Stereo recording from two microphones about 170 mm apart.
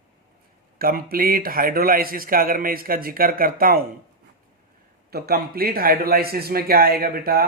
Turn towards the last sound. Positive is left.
turn(degrees=-60)  # may be behind; listen again after turning